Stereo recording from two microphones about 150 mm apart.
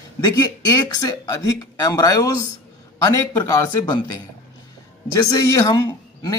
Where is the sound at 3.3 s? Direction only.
25° left (ahead or behind).